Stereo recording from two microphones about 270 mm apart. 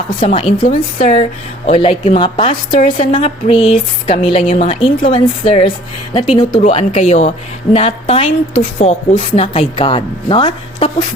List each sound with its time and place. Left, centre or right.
0.2 s a woman's voice: left